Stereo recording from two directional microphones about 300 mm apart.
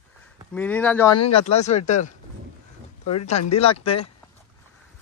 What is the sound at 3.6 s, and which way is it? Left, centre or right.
Speech, centre.